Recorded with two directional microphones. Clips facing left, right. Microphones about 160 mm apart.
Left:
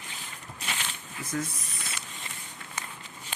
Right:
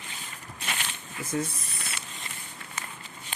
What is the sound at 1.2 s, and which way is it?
Speech, 30° right (ahead or behind).